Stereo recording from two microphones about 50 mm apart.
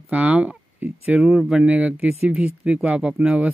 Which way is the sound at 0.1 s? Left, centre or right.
Right.